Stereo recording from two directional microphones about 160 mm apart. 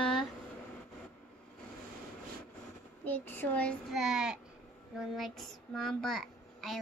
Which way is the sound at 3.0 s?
10° left (ahead or behind).